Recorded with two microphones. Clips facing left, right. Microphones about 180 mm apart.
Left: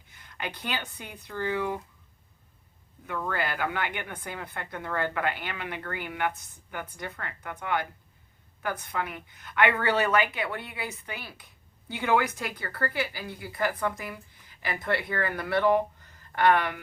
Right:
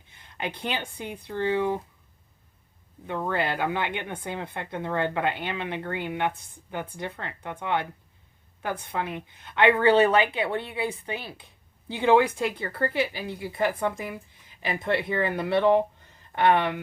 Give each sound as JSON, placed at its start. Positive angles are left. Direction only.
{"t": 0.1, "sound": "speech", "side_deg": -25}
{"t": 3.1, "sound": "a woman's voice", "side_deg": -25}